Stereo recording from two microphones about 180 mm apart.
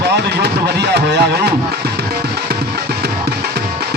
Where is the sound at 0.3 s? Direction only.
65° right (ahead or behind).